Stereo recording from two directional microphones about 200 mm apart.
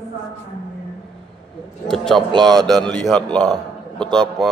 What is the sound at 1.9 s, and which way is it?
A man's voice, centre (ahead or behind).